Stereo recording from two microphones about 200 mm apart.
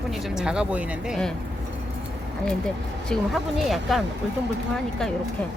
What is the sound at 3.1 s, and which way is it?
Speech, centre (ahead or behind).